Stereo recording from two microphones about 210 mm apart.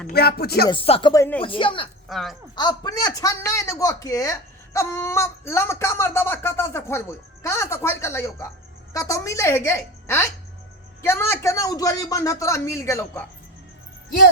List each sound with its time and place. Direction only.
0.1 s speech: 50° left (ahead or behind)
0.7 s speech: 25° left (ahead or behind)
1.1 s speech: 15° left (ahead or behind)
1.4 s speech: 25° left (ahead or behind)
2.0 s speech: centre (ahead or behind)
2.6 s speech: 20° left (ahead or behind)